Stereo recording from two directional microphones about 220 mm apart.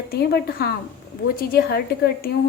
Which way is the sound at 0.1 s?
45° left (ahead or behind).